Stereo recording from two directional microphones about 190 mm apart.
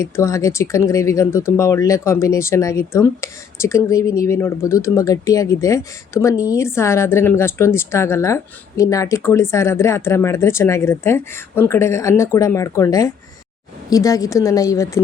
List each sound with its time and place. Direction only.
0.0 s speech: 15° left (ahead or behind)